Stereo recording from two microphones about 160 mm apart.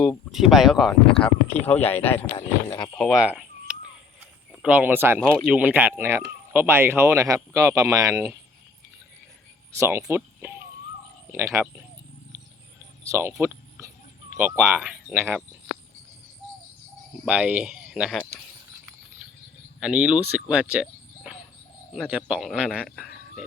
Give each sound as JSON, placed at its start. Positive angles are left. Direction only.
{"t": 0.0, "sound": "speech", "side_deg": 0}
{"t": 2.1, "sound": "speech", "side_deg": 30}
{"t": 2.9, "sound": "speech", "side_deg": 5}
{"t": 3.2, "sound": "a sound", "side_deg": -10}
{"t": 4.6, "sound": "speech", "side_deg": -10}
{"t": 5.2, "sound": "speech", "side_deg": 5}
{"t": 5.5, "sound": "speech", "side_deg": -10}
{"t": 9.7, "sound": "speech", "side_deg": -15}
{"t": 13.1, "sound": "speech", "side_deg": -15}
{"t": 13.4, "sound": "a sound", "side_deg": -15}
{"t": 17.2, "sound": "speech", "side_deg": -10}
{"t": 19.8, "sound": "speech", "side_deg": -5}
{"t": 21.9, "sound": "speech", "side_deg": -5}